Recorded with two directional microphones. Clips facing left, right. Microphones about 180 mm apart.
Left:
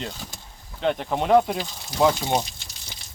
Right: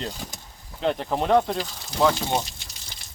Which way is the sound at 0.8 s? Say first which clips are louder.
Even; centre (ahead or behind).